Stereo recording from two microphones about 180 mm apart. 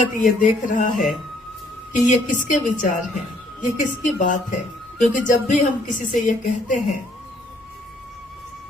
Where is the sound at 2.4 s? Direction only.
45° left (ahead or behind).